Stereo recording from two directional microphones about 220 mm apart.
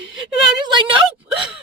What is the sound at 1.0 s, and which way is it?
Speech, centre (ahead or behind).